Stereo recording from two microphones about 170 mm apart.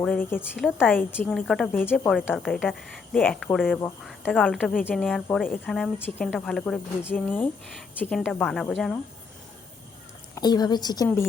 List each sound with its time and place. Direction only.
0.0 s a woman's voice: 10° left (ahead or behind)
0.5 s speech: 5° right (ahead or behind)
0.9 s a woman's voice: 10° left (ahead or behind)
10.3 s a woman's voice: 25° left (ahead or behind)